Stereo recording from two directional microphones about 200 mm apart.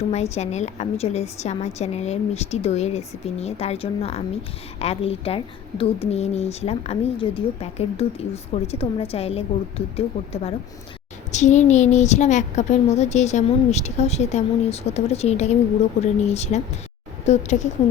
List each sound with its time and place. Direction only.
0.1 s a woman's voice: 35° left (ahead or behind)